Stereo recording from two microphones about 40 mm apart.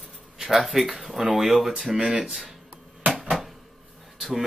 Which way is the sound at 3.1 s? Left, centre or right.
Centre.